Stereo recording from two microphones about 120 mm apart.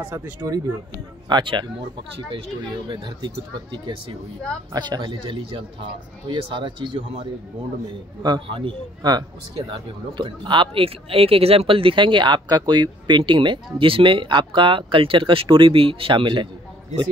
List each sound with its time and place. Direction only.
0.0 s speech: 20° right (ahead or behind)
1.3 s speech: 40° right (ahead or behind)
2.9 s speech: 40° right (ahead or behind)
4.7 s speech: 35° right (ahead or behind)